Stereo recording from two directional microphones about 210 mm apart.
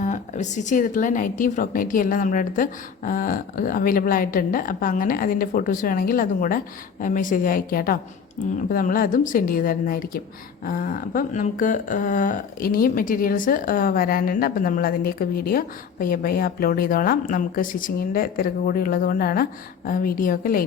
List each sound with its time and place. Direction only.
0.0 s speech: 35° left (ahead or behind)